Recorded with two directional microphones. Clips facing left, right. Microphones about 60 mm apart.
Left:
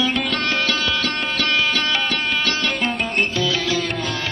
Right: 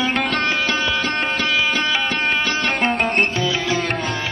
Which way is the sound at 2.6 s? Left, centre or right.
Right.